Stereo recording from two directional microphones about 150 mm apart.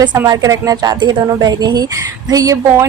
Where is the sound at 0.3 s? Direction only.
20° right (ahead or behind).